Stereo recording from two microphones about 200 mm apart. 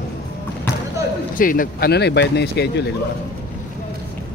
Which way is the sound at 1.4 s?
45° left (ahead or behind).